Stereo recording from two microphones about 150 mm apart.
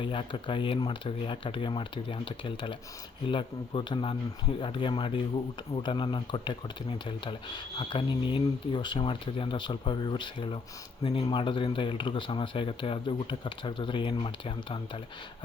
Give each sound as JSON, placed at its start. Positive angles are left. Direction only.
{"t": 0.0, "sound": "speech", "side_deg": 35}
{"t": 7.8, "sound": "speech", "side_deg": 35}